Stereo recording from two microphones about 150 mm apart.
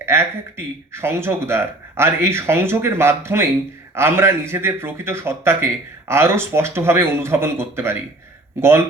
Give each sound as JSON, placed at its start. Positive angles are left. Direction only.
{"t": 0.0, "sound": "a man's voice", "side_deg": -15}